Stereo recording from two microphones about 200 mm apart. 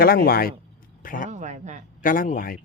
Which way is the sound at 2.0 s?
45° left (ahead or behind).